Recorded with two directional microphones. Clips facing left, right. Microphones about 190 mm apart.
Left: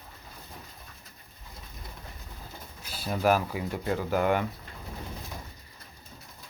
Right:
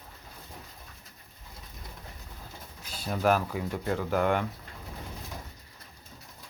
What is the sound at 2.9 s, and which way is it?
Speech, 5° left (ahead or behind).